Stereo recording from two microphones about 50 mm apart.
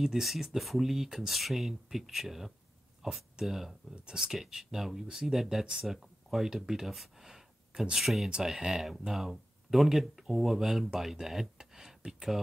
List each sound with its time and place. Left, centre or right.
0.0 s speech: centre